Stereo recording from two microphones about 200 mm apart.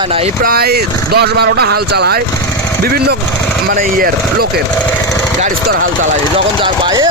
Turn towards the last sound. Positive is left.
turn(degrees=-25)  # may be behind; listen again after turning